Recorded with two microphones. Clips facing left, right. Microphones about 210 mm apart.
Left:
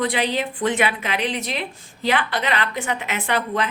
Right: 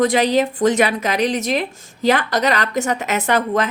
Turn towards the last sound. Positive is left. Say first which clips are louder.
# right 5 dB
turn(degrees=-45)  # may be behind; listen again after turning